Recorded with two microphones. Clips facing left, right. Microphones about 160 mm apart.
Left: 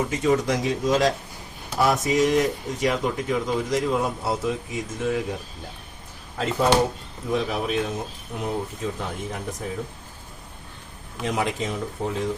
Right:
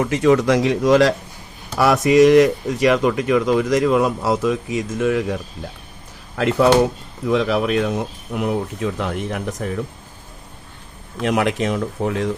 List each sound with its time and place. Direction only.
0.0 s speech: 75° right (ahead or behind)
7.3 s speech: 90° right
11.2 s speech: 70° right (ahead or behind)